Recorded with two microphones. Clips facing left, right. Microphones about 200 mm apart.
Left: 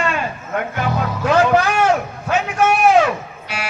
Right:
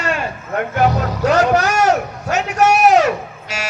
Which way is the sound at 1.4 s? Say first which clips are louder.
Even; 40° right (ahead or behind).